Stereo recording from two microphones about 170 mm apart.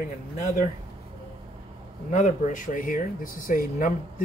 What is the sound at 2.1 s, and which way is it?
Speech, 50° left (ahead or behind).